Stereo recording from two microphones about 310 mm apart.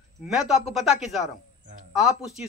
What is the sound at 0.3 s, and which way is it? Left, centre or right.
Speech, centre.